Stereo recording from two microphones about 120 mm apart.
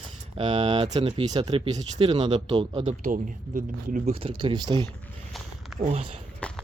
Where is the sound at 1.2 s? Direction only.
35° right (ahead or behind).